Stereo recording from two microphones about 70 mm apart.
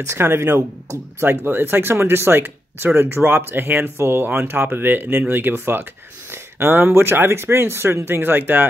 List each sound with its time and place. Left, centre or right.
0.0 s speech: right